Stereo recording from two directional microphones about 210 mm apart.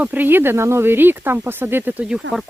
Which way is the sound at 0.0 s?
10° right (ahead or behind).